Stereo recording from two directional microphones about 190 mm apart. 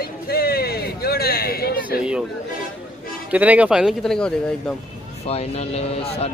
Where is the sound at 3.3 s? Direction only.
10° right (ahead or behind).